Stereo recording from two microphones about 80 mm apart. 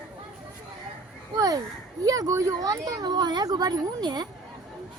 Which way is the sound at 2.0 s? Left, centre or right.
Right.